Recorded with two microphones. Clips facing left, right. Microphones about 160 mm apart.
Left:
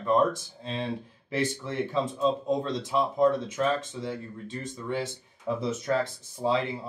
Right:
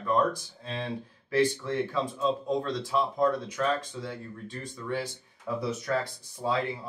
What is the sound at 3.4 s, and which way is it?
Speech, 25° left (ahead or behind).